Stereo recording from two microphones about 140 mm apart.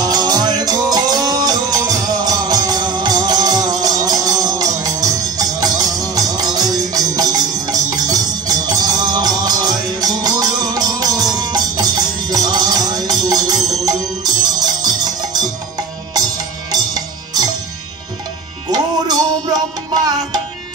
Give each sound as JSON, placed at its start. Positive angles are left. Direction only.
{"t": 0.0, "sound": "music", "side_deg": -25}
{"t": 16.7, "sound": "music", "side_deg": -30}
{"t": 18.7, "sound": "music", "side_deg": -30}